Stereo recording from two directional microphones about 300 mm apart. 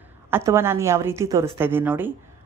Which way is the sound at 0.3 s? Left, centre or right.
Centre.